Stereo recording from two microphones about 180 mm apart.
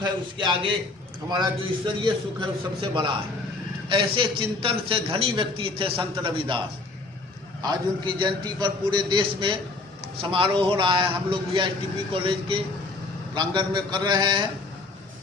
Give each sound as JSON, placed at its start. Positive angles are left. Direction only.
{"t": 0.0, "sound": "a man's voice", "side_deg": -25}
{"t": 7.6, "sound": "a man's voice", "side_deg": -25}